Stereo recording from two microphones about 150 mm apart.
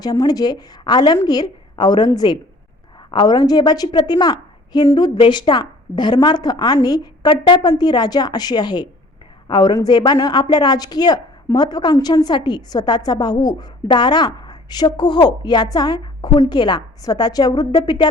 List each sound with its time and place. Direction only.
0.0 s a woman's voice: 25° left (ahead or behind)